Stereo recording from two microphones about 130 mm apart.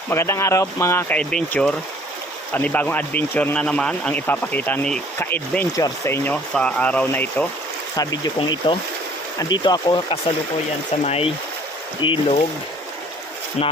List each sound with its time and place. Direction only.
0.1 s speech: 20° left (ahead or behind)
1.1 s a man's voice: 5° left (ahead or behind)
6.3 s a man's voice: 10° left (ahead or behind)
8.4 s speech: 40° left (ahead or behind)
11.0 s speech: 50° left (ahead or behind)
12.0 s speech: 40° left (ahead or behind)
13.6 s speech: 55° left (ahead or behind)